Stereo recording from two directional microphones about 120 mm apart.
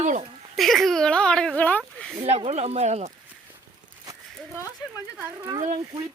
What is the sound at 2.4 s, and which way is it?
Speech, 60° right (ahead or behind).